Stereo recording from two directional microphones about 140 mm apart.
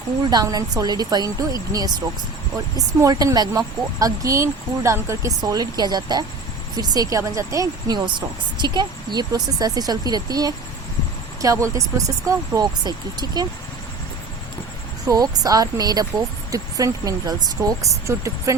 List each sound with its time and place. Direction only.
0.3 s speech: 30° right (ahead or behind)
15.0 s speech: 25° right (ahead or behind)